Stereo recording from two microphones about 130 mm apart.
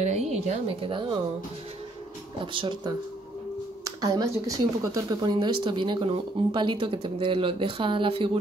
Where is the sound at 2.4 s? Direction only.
40° right (ahead or behind).